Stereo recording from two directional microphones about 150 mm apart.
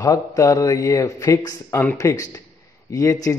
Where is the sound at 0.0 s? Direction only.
25° left (ahead or behind).